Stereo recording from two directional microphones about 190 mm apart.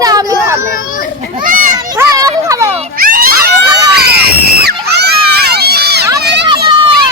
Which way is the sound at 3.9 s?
55° right (ahead or behind).